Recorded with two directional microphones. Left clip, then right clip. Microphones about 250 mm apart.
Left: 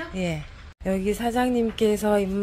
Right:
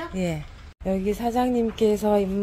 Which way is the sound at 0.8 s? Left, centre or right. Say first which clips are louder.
Even; centre.